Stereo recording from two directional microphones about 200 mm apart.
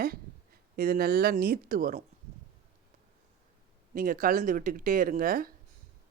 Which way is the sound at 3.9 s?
45° right (ahead or behind).